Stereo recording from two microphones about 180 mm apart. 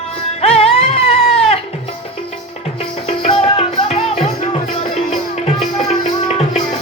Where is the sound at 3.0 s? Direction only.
35° left (ahead or behind).